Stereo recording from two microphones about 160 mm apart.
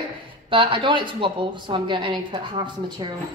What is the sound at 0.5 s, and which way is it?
A woman's voice, 30° right (ahead or behind).